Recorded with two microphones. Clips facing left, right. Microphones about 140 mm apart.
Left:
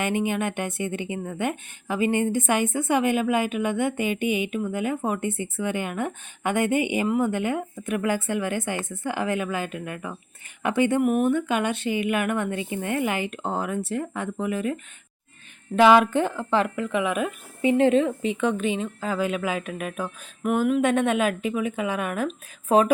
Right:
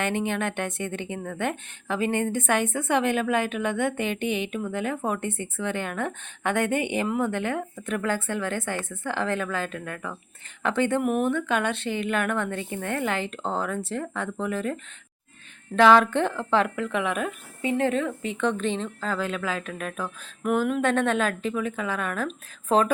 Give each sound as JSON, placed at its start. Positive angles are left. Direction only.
{"t": 0.0, "sound": "a woman's voice", "side_deg": 10}
{"t": 17.6, "sound": "a woman's voice", "side_deg": 20}